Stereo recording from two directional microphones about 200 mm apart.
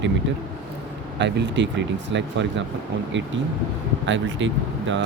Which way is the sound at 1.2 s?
60° right (ahead or behind).